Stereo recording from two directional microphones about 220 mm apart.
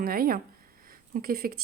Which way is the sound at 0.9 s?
40° right (ahead or behind).